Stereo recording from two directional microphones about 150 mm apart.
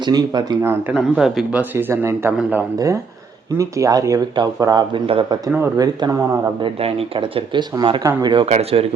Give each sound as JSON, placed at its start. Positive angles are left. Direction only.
{"t": 0.0, "sound": "speech", "side_deg": -30}
{"t": 0.6, "sound": "speech", "side_deg": -15}
{"t": 0.9, "sound": "a man's voice", "side_deg": 0}
{"t": 6.7, "sound": "speech", "side_deg": -40}
{"t": 8.4, "sound": "speech", "side_deg": -45}